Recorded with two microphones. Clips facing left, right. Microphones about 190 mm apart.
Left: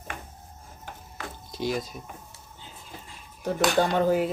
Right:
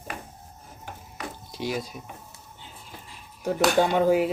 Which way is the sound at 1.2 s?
10° right (ahead or behind).